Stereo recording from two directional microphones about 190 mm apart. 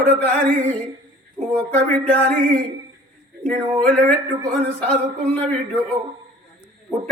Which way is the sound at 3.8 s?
5° left (ahead or behind).